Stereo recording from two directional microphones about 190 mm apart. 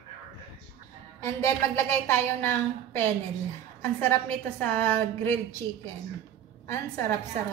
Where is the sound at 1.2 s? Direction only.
15° left (ahead or behind).